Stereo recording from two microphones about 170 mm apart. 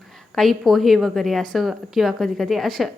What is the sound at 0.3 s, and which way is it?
A woman's voice, centre (ahead or behind).